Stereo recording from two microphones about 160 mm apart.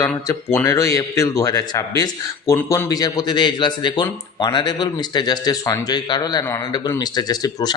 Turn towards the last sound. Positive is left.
turn(degrees=25)  # may be behind; listen again after turning